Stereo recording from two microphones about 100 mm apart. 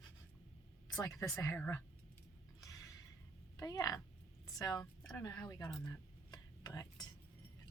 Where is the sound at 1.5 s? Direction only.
20° left (ahead or behind).